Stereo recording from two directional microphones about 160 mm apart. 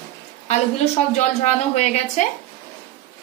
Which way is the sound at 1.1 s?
45° left (ahead or behind).